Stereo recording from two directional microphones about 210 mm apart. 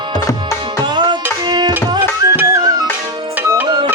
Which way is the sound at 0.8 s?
20° right (ahead or behind).